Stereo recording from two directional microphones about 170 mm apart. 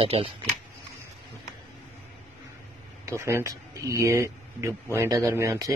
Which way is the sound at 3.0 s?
15° right (ahead or behind).